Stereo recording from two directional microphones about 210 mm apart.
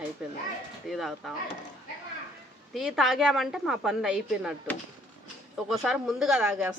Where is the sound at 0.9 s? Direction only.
Centre (ahead or behind).